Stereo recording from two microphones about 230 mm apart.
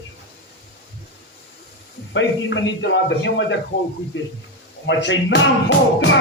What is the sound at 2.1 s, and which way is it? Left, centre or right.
A man's voice, left.